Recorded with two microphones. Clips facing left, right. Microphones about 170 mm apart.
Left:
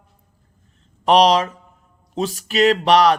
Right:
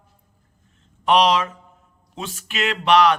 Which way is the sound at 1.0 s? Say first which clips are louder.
Left 3 dB; 40° left (ahead or behind).